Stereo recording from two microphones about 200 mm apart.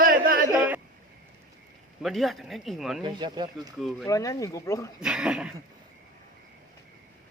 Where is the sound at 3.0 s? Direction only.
25° right (ahead or behind).